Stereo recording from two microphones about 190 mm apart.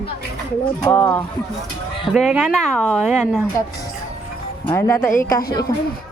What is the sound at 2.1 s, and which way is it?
Speech, centre (ahead or behind).